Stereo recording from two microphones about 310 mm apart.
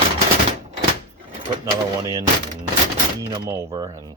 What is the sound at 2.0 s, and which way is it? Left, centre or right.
Speech, centre.